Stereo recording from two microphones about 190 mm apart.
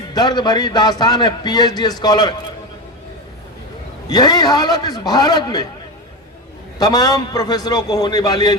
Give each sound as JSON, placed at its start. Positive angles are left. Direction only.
{"t": 0.1, "sound": "a man's voice", "side_deg": 20}
{"t": 4.1, "sound": "a man's voice", "side_deg": 20}
{"t": 6.7, "sound": "a man's voice", "side_deg": 20}